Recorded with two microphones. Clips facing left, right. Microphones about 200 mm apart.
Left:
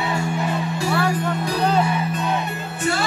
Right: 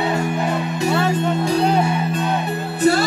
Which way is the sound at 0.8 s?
20° right (ahead or behind).